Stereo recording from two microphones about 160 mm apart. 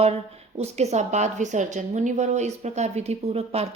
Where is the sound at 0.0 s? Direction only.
40° right (ahead or behind).